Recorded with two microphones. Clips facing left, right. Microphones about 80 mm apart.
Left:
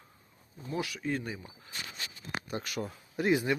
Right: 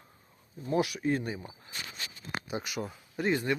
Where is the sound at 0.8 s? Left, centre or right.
Right.